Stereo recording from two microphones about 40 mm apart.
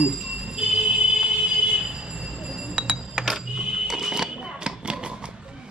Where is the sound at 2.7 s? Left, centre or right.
Right.